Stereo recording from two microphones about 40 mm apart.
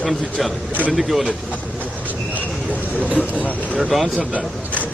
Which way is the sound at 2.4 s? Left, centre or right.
Right.